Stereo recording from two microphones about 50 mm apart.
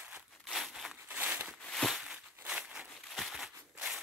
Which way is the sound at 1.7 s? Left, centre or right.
Centre.